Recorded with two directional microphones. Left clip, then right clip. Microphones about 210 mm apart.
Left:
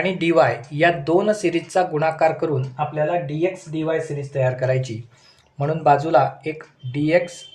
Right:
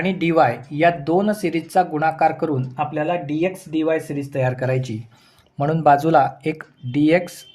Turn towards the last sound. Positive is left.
turn(degrees=-35)  # may be behind; listen again after turning